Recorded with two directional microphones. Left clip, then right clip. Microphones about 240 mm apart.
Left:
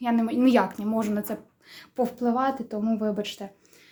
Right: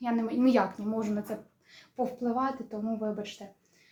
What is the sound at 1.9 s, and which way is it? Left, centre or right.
A woman's voice, left.